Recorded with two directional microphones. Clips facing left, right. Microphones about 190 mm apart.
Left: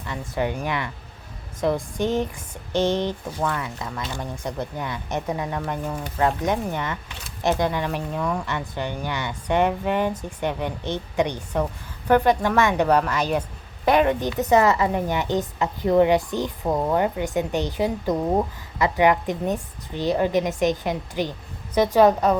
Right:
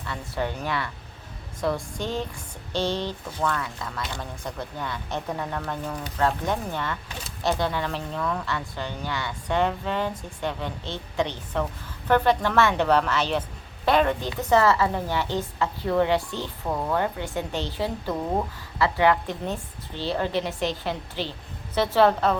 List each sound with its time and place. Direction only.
0.0 s a woman's voice: 15° left (ahead or behind)